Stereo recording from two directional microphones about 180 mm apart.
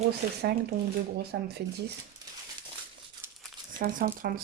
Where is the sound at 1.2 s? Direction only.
65° right (ahead or behind).